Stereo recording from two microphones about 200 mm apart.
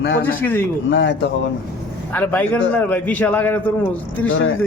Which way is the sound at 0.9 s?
65° left (ahead or behind).